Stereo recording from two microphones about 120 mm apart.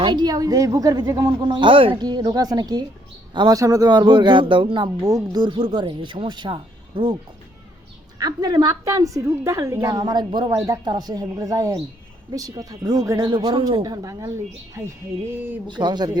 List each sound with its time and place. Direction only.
0.0 s speech: 40° right (ahead or behind)
5.0 s speech: 30° right (ahead or behind)
8.2 s a woman's voice: 35° right (ahead or behind)
13.8 s a woman's voice: 30° right (ahead or behind)
15.6 s speech: 40° right (ahead or behind)